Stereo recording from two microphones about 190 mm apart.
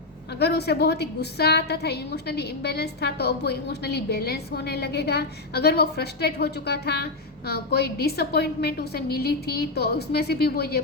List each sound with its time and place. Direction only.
0.3 s a woman's voice: 60° left (ahead or behind)